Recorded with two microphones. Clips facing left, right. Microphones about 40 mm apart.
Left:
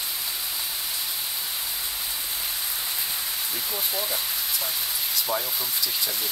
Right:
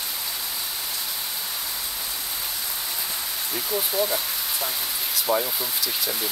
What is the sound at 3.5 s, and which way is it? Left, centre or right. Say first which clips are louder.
Speech: right 6 dB; centre.